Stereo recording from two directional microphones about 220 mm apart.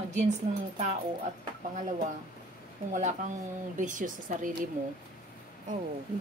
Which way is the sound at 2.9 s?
35° right (ahead or behind).